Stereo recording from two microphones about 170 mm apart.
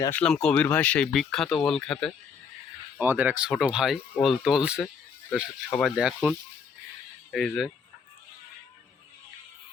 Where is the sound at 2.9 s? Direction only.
10° right (ahead or behind).